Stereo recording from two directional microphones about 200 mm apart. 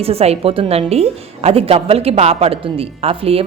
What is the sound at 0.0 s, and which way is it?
A woman's voice, 30° right (ahead or behind).